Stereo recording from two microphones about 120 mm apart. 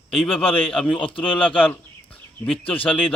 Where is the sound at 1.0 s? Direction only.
45° left (ahead or behind).